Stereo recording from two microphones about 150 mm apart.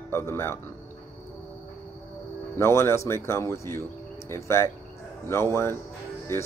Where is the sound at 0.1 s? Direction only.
15° left (ahead or behind).